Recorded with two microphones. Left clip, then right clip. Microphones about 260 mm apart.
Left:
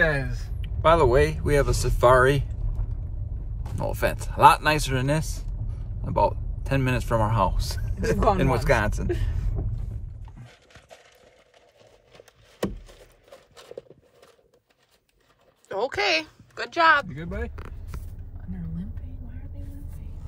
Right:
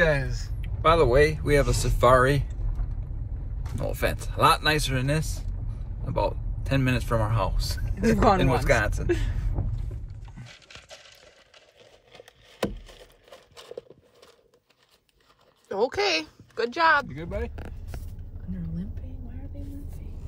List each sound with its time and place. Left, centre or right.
0.0 s speech: centre
3.7 s speech: centre
12.1 s a sound: centre
15.7 s speech: right